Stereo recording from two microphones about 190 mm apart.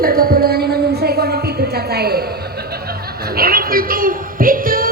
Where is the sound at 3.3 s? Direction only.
50° right (ahead or behind).